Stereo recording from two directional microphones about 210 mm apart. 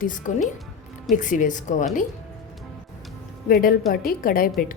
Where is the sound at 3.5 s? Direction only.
45° left (ahead or behind).